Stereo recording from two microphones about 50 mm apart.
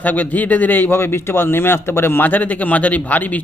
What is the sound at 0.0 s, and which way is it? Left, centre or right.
A man's voice, left.